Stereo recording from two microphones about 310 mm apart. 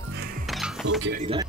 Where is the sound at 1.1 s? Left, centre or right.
Centre.